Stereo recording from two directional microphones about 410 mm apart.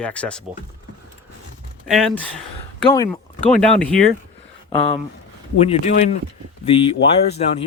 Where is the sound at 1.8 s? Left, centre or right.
Centre.